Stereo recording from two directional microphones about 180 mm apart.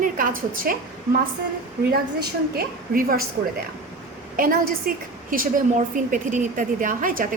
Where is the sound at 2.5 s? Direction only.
55° right (ahead or behind).